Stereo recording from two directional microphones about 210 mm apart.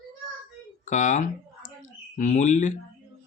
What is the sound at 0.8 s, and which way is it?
Speech, 35° left (ahead or behind).